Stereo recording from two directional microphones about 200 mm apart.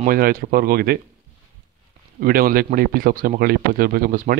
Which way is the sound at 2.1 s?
45° right (ahead or behind).